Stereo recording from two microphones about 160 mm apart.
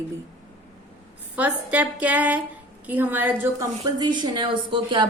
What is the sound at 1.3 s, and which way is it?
A woman's voice, 10° right (ahead or behind).